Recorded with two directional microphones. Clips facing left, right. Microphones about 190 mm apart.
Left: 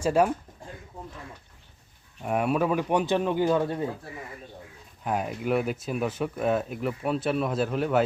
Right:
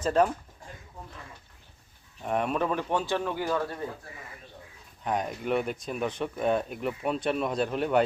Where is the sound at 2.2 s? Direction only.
5° left (ahead or behind).